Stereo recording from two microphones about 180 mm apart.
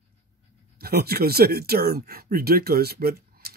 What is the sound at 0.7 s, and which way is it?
Speech, 60° right (ahead or behind).